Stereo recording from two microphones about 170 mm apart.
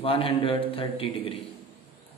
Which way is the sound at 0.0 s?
35° left (ahead or behind).